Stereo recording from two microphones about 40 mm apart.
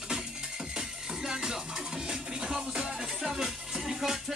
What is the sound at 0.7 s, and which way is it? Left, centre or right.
Music, centre.